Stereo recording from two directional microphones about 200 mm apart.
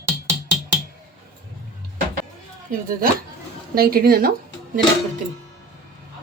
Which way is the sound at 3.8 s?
50° right (ahead or behind).